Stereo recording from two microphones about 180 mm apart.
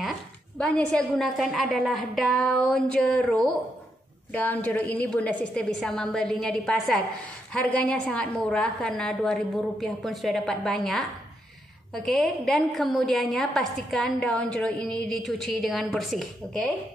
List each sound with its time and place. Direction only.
0.6 s a woman's voice: 5° left (ahead or behind)